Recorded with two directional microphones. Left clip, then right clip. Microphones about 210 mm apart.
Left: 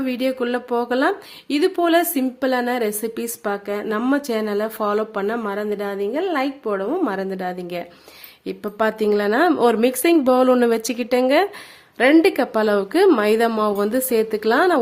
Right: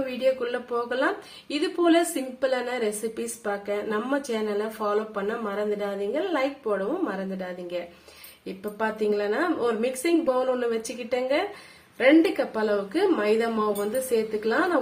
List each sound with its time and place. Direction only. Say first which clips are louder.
0.3 s speech: left 1 dB; 55° left (ahead or behind)